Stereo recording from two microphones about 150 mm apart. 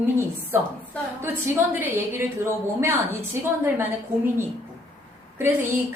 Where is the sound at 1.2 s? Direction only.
15° right (ahead or behind).